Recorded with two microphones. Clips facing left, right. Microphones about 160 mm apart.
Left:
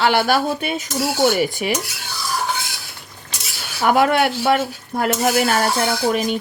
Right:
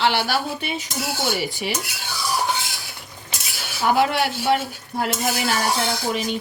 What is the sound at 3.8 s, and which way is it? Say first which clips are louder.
Speech: left 4 dB; 55° left (ahead or behind).